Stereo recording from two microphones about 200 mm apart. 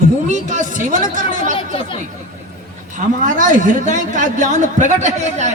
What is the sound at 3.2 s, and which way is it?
A man's voice, 40° right (ahead or behind).